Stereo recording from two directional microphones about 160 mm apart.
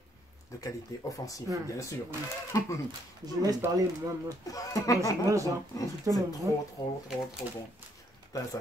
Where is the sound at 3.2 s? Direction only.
25° right (ahead or behind).